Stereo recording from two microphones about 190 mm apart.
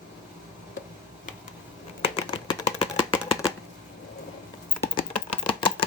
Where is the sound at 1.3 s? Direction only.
45° left (ahead or behind).